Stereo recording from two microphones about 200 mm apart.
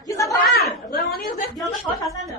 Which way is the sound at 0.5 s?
50° left (ahead or behind).